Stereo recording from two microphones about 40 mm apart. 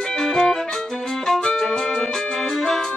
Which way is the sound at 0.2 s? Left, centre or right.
Centre.